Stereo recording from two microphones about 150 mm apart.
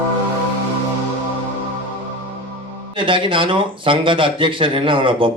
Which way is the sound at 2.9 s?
35° right (ahead or behind).